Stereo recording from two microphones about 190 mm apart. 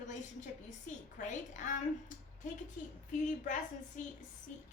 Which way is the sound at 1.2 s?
40° left (ahead or behind).